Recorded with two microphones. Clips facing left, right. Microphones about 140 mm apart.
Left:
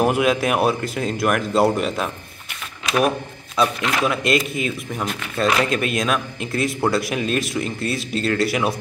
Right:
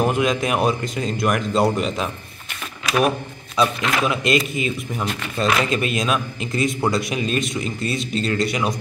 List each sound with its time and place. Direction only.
0.0 s speech: 10° left (ahead or behind)
2.8 s shuffling cards: 25° left (ahead or behind)
3.5 s speech: centre (ahead or behind)